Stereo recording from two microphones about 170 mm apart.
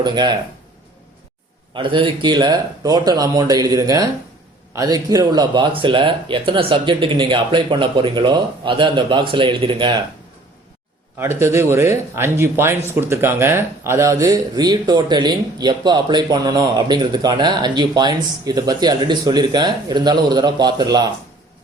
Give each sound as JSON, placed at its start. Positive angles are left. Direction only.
{"t": 0.0, "sound": "speech", "side_deg": -25}
{"t": 1.7, "sound": "speech", "side_deg": -30}
{"t": 11.2, "sound": "speech", "side_deg": -15}